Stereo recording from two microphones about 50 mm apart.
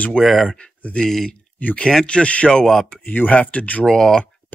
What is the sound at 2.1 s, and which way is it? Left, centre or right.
Speech, left.